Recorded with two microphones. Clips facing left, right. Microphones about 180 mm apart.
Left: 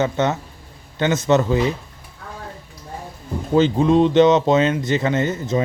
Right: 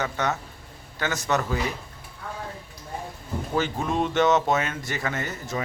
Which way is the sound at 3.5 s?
20° left (ahead or behind).